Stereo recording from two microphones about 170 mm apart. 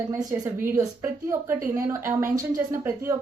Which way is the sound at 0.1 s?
20° right (ahead or behind).